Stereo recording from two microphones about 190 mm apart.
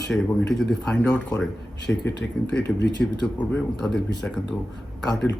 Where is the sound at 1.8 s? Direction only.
65° left (ahead or behind).